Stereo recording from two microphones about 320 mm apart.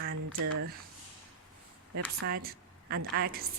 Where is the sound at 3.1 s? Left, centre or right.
Right.